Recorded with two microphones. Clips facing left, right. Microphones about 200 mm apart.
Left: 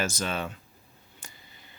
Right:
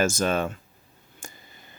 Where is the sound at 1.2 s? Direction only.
45° right (ahead or behind).